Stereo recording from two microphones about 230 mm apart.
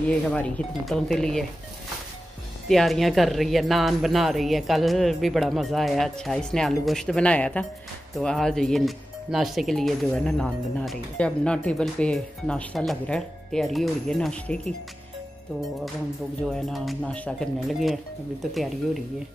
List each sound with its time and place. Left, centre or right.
0.3 s speech: centre
2.7 s speech: centre
16.4 s speech: centre